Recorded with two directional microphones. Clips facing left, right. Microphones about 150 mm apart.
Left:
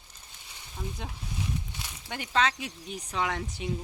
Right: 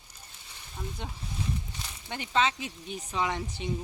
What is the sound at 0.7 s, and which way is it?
Speech, centre (ahead or behind).